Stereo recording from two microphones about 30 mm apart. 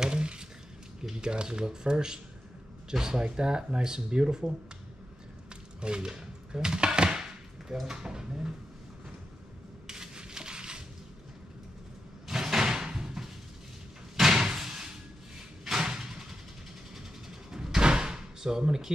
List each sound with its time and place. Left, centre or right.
0.0 s a sound: right
1.1 s speech: right
2.9 s speech: centre
3.2 s speech: right
5.8 s speech: right
9.8 s a sound: right
12.5 s door: centre
17.5 s door: right
18.7 s speech: centre